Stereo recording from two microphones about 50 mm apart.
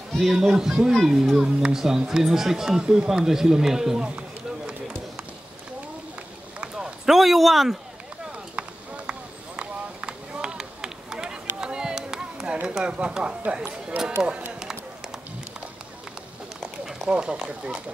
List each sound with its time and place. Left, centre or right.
0.2 s speech: centre
7.1 s speech: centre
8.5 s run: right
12.6 s speech: centre
16.6 s speech: centre